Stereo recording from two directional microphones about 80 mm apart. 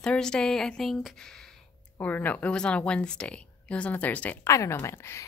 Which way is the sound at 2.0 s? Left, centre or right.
Left.